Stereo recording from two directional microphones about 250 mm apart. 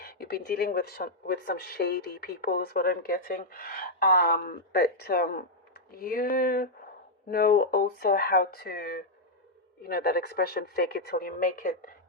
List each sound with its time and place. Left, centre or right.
0.0 s speech: left